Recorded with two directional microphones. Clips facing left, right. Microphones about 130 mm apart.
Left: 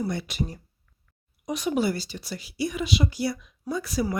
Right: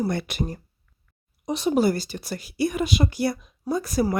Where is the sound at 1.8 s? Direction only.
45° right (ahead or behind).